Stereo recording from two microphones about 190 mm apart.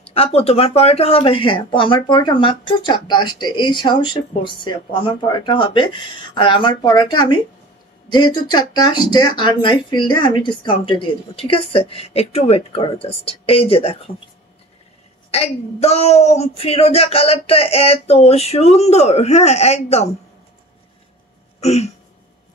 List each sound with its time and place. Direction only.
0.0 s speech: 30° left (ahead or behind)
15.3 s speech: 35° left (ahead or behind)
21.5 s a sound: 35° left (ahead or behind)